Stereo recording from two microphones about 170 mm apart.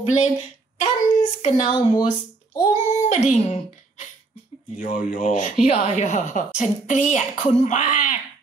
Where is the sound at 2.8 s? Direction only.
45° left (ahead or behind).